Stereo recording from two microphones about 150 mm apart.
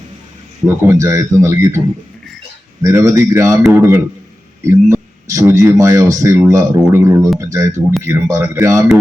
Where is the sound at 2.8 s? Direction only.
20° right (ahead or behind).